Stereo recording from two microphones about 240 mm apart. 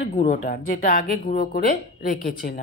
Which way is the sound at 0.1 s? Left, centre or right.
Left.